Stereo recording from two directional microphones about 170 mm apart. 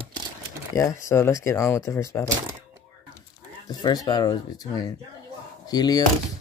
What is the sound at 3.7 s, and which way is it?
Speech, 20° left (ahead or behind).